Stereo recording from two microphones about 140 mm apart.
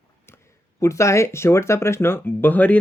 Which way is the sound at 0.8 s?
20° left (ahead or behind).